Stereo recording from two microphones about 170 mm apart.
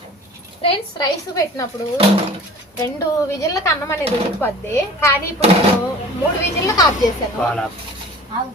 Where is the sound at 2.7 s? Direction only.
15° left (ahead or behind).